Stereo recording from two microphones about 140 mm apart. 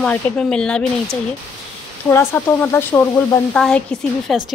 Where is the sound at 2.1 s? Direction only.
15° left (ahead or behind).